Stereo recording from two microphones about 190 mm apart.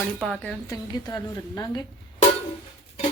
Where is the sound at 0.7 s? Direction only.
20° left (ahead or behind).